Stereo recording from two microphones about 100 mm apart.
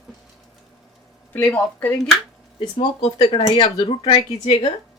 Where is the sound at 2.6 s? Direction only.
45° left (ahead or behind).